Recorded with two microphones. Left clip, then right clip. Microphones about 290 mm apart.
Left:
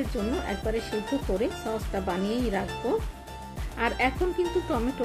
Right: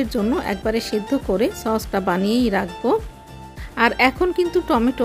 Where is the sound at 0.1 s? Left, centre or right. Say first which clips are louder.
Right 8 dB; right.